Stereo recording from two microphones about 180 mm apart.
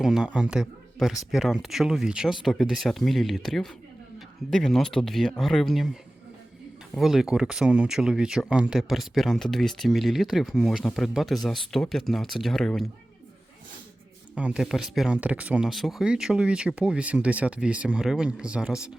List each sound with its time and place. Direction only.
0.0 s speech: centre (ahead or behind)
6.9 s speech: centre (ahead or behind)
14.3 s speech: 5° right (ahead or behind)